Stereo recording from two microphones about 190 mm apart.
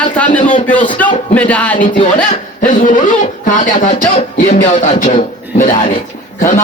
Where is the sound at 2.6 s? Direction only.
40° left (ahead or behind).